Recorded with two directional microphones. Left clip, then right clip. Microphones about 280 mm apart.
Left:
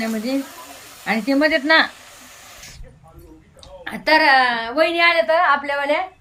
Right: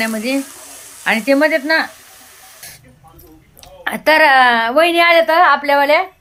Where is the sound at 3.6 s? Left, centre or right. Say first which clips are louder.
Right 9 dB; centre.